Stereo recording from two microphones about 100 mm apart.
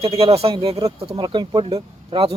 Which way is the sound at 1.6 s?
75° right (ahead or behind).